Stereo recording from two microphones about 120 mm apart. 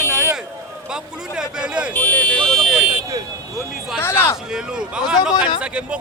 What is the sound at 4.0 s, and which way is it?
Speech, 20° left (ahead or behind).